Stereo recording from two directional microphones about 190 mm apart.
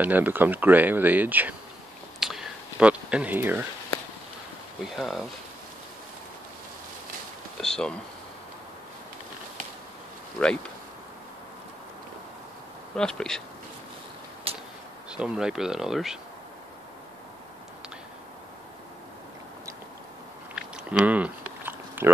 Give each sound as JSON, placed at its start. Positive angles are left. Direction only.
{"t": 0.0, "sound": "speech", "side_deg": -10}
{"t": 2.1, "sound": "a sound", "side_deg": 0}
{"t": 4.8, "sound": "speech", "side_deg": 0}
{"t": 7.6, "sound": "speech", "side_deg": 5}
{"t": 10.4, "sound": "speech", "side_deg": 5}
{"t": 12.9, "sound": "speech", "side_deg": 5}
{"t": 14.5, "sound": "a sound", "side_deg": -30}
{"t": 15.0, "sound": "speech", "side_deg": -5}
{"t": 20.5, "sound": "a sound", "side_deg": -5}